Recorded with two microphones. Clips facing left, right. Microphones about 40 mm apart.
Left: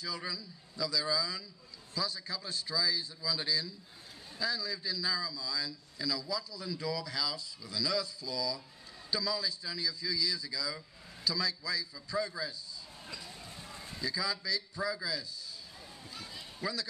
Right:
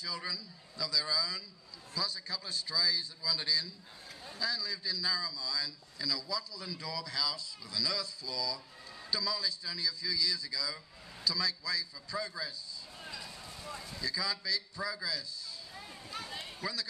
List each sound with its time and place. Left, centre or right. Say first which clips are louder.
0.0 s a man's voice: even; centre
13.0 s basketball bounce: right 2 dB; centre
13.3 s vehicle: even; left
13.7 s a sound: right 1 dB; left
14.0 s a man's voice: left 1 dB; centre
16.1 s run: right 5 dB; right